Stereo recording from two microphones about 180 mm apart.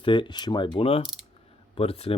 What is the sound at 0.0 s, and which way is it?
Speech, 25° left (ahead or behind).